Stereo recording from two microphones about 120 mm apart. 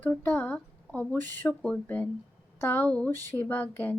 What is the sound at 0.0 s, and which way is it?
Speech, 15° left (ahead or behind).